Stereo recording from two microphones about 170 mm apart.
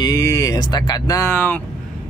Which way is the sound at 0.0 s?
20° left (ahead or behind).